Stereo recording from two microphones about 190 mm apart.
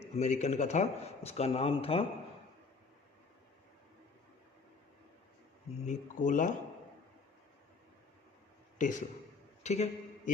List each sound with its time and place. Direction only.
0.0 s speech: 35° left (ahead or behind)
5.8 s speech: 40° left (ahead or behind)
8.8 s a man's voice: 40° left (ahead or behind)